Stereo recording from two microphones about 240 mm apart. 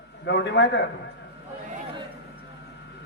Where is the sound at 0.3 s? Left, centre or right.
Left.